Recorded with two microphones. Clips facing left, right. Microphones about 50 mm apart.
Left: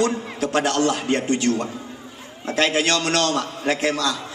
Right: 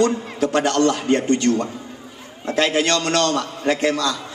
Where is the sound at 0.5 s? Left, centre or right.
Centre.